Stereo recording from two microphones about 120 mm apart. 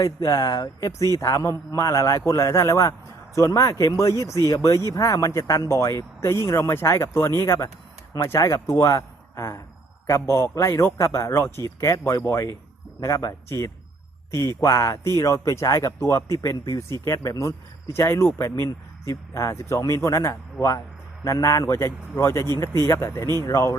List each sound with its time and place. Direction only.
0.0 s a man's voice: 30° left (ahead or behind)